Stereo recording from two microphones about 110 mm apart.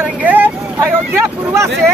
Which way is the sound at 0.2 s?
15° right (ahead or behind).